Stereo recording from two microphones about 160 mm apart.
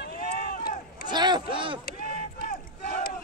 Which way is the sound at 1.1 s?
25° right (ahead or behind).